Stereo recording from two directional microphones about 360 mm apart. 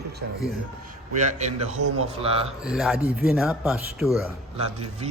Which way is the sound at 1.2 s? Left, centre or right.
Centre.